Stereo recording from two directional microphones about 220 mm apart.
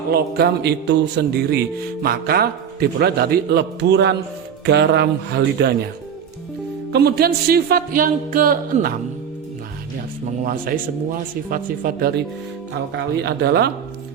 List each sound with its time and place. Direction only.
0.1 s a man's voice: 45° right (ahead or behind)
6.9 s a man's voice: 45° right (ahead or behind)
10.4 s speech: 40° right (ahead or behind)
13.2 s a man's voice: 45° right (ahead or behind)